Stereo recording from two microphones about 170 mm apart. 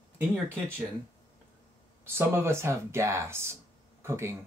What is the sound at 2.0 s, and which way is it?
Speech, 15° right (ahead or behind).